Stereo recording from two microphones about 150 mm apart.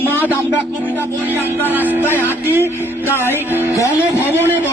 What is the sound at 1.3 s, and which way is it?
Music, 15° right (ahead or behind).